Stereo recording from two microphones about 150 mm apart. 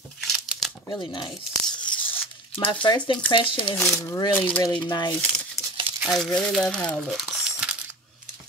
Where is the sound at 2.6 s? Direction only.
35° left (ahead or behind).